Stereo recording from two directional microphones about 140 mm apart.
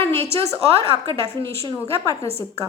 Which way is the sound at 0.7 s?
45° right (ahead or behind).